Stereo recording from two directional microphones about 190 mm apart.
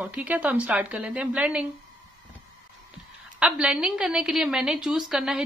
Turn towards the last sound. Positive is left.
turn(degrees=0)  # may be behind; listen again after turning